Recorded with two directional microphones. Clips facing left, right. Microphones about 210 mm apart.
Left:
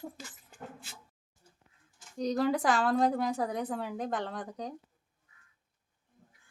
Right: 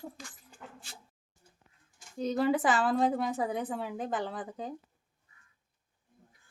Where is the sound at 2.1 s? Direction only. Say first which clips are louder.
Right 1 dB; centre (ahead or behind).